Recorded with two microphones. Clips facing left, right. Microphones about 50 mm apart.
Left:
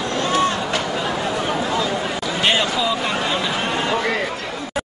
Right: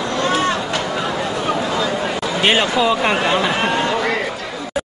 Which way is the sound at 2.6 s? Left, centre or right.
Right.